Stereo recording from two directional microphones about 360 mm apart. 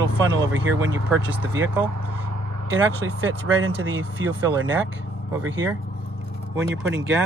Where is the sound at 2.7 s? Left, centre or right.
Right.